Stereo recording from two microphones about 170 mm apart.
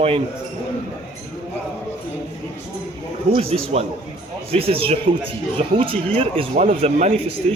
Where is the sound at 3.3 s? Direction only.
35° right (ahead or behind).